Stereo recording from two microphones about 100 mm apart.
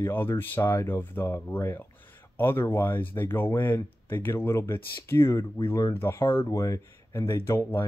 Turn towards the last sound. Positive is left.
turn(degrees=25)  # may be behind; listen again after turning